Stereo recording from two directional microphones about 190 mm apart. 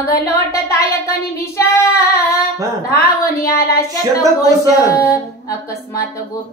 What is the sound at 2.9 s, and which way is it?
Speech, 15° left (ahead or behind).